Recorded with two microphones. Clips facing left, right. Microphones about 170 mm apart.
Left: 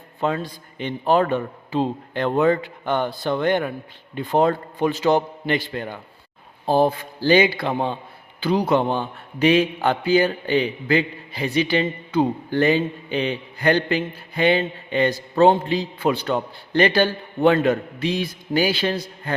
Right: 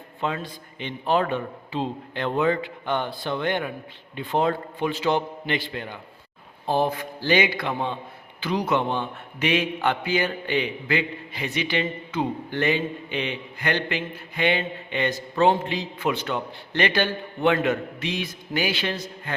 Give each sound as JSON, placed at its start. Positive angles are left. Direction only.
{"t": 0.2, "sound": "a man's voice", "side_deg": 40}
{"t": 6.7, "sound": "a man's voice", "side_deg": 35}